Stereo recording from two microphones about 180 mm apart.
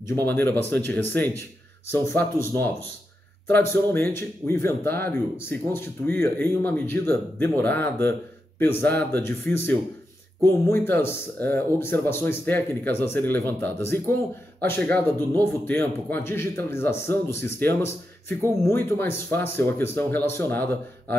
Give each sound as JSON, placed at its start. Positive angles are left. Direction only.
{"t": 0.0, "sound": "speech", "side_deg": 10}
{"t": 3.7, "sound": "speech", "side_deg": 10}